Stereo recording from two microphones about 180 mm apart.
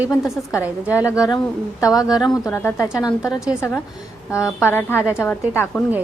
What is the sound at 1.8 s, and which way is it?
A woman's voice, 20° left (ahead or behind).